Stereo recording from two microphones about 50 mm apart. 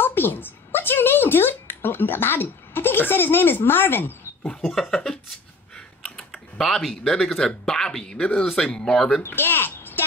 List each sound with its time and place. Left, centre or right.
0.0 s a sound: left
4.6 s speech: centre
6.0 s typing: centre
7.1 s speech: centre
8.2 s speech: left
9.2 s a sound: left